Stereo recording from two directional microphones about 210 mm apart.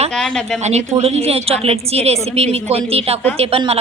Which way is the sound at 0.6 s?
30° right (ahead or behind).